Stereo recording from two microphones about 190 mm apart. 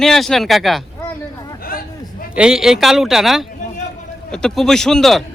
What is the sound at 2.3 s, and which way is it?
A man's voice, 5° right (ahead or behind).